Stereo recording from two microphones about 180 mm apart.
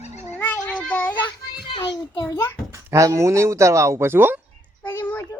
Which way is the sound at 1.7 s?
25° left (ahead or behind).